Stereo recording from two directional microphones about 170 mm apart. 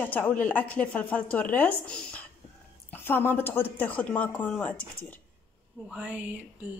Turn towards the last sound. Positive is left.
turn(degrees=-10)  # may be behind; listen again after turning